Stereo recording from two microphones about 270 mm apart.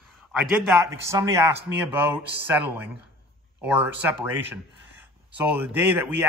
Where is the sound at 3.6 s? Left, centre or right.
Centre.